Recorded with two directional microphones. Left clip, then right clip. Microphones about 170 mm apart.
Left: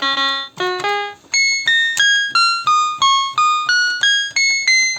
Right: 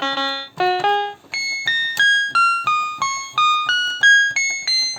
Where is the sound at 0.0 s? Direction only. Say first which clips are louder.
Left 4 dB; 55° right (ahead or behind).